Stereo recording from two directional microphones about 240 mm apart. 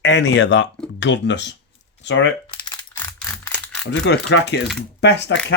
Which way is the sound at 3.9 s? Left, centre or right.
Left.